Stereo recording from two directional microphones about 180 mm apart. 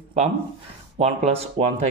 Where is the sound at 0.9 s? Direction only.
35° right (ahead or behind).